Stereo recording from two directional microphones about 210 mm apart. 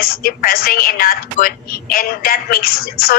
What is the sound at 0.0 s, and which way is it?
A woman's voice, 45° left (ahead or behind).